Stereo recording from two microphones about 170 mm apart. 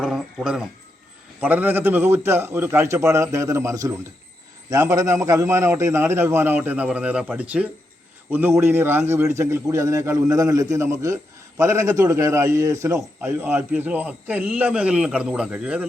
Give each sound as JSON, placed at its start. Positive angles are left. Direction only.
{"t": 0.0, "sound": "a man's voice", "side_deg": -5}